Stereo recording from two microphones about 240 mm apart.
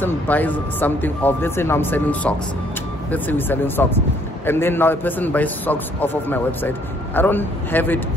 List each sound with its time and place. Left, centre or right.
0.0 s speech: centre